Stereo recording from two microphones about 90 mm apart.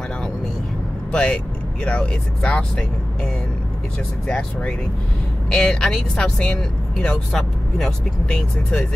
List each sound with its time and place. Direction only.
1.1 s speech: 10° left (ahead or behind)
4.3 s speech: 5° left (ahead or behind)